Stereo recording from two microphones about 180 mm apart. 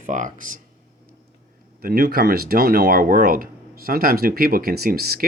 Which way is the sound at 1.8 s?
55° right (ahead or behind).